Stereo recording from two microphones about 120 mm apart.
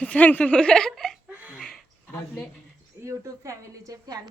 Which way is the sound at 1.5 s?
5° left (ahead or behind).